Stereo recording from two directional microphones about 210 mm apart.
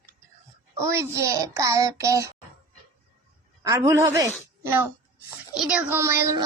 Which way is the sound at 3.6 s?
15° right (ahead or behind).